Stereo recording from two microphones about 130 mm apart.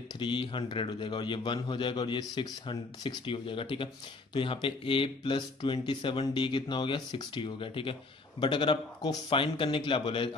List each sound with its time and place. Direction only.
0.2 s a man's voice: 40° left (ahead or behind)